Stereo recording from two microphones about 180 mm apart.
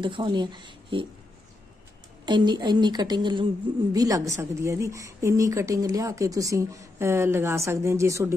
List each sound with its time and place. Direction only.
0.0 s a woman's voice: 25° right (ahead or behind)
2.2 s a woman's voice: 25° right (ahead or behind)